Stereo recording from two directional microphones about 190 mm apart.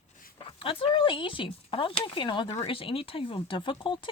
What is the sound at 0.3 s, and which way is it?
Speech, 30° left (ahead or behind).